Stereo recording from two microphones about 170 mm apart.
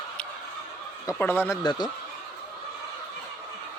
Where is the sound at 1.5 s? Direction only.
25° left (ahead or behind).